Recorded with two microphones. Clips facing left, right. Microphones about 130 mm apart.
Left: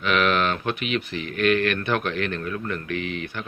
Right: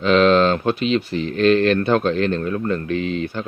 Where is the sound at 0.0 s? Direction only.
30° right (ahead or behind).